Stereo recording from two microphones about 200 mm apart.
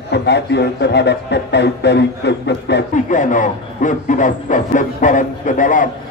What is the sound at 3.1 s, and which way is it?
Speech, 40° left (ahead or behind).